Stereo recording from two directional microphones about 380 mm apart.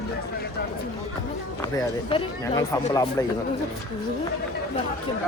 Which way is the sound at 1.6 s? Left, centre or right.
Centre.